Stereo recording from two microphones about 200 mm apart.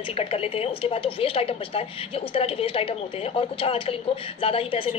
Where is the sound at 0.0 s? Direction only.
30° left (ahead or behind).